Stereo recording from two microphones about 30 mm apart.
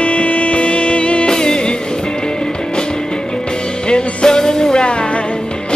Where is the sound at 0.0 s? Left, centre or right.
Left.